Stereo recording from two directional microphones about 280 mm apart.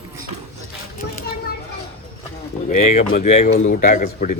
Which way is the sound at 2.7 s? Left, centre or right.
Left.